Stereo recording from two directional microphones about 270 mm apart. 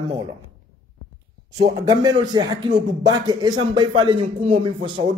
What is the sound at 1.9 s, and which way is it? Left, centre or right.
A man's voice, centre.